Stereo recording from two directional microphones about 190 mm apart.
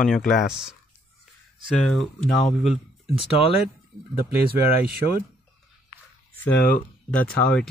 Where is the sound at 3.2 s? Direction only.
30° left (ahead or behind).